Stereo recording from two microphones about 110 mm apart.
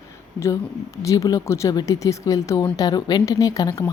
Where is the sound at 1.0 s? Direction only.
30° left (ahead or behind).